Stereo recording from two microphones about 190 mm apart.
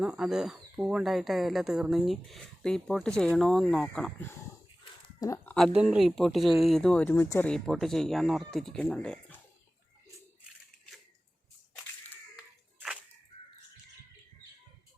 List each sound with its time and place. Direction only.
0.0 s speech: 5° right (ahead or behind); by 5.5 s 15° left (ahead or behind)
5.5 s speech: centre (ahead or behind)